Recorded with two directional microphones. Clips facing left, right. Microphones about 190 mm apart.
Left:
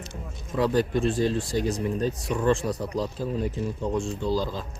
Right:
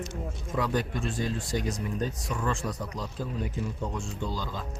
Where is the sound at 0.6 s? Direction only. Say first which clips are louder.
Left 7 dB; 30° left (ahead or behind).